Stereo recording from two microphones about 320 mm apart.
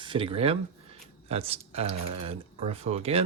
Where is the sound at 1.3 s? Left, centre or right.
Centre.